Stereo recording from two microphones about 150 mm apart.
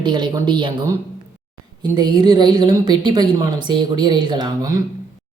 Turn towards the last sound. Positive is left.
turn(degrees=-25)  # may be behind; listen again after turning